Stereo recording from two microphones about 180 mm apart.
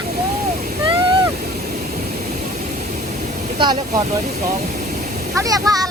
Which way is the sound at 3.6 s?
25° right (ahead or behind).